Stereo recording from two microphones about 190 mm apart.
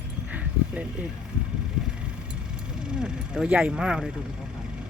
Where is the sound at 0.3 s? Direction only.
5° right (ahead or behind).